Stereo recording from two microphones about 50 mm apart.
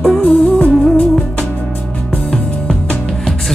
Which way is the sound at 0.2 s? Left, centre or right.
Left.